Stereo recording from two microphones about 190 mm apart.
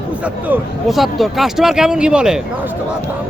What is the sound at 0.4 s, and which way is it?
Speech, 5° right (ahead or behind).